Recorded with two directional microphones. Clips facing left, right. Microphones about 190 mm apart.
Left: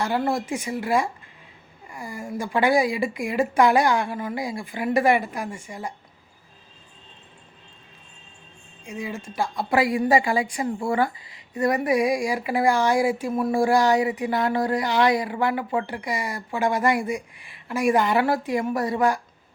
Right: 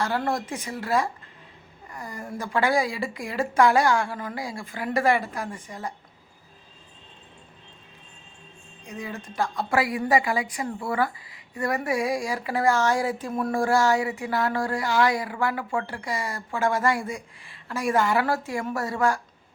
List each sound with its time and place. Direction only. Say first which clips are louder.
0.0 s speech: left 2 dB; 10° left (ahead or behind)
8.9 s a woman's voice: left 3 dB; 10° left (ahead or behind)